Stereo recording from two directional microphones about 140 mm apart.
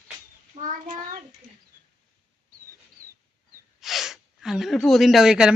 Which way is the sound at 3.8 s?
Centre (ahead or behind).